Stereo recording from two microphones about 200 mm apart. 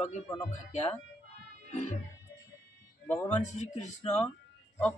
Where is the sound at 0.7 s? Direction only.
35° left (ahead or behind).